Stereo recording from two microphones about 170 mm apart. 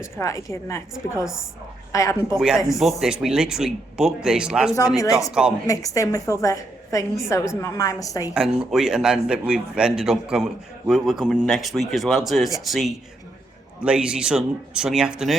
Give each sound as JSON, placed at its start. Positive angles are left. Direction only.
{"t": 0.0, "sound": "a woman's voice", "side_deg": 15}
{"t": 1.9, "sound": "a woman's voice", "side_deg": 20}
{"t": 2.7, "sound": "speech", "side_deg": 0}
{"t": 4.9, "sound": "a woman's voice", "side_deg": 20}
{"t": 5.3, "sound": "speech", "side_deg": -5}
{"t": 5.6, "sound": "a woman's voice", "side_deg": 20}
{"t": 8.3, "sound": "speech", "side_deg": -5}